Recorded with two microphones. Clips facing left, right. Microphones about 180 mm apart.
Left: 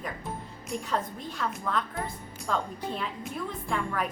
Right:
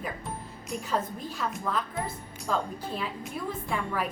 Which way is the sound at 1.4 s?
5° right (ahead or behind).